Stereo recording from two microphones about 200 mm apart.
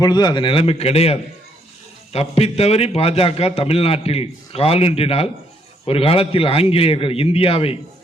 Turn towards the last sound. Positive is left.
turn(degrees=30)  # may be behind; listen again after turning